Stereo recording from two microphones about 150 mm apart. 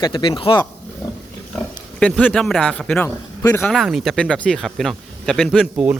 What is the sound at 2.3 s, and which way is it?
A man's voice, centre (ahead or behind).